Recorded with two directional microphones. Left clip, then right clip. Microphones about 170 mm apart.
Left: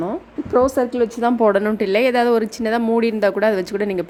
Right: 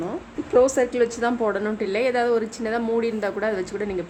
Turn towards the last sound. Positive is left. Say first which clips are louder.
# left 6 dB
turn(degrees=50)  # may be behind; listen again after turning